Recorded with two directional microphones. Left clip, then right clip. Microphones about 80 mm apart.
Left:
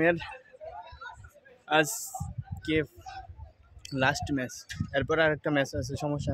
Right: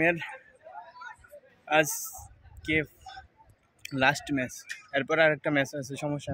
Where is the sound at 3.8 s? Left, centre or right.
Left.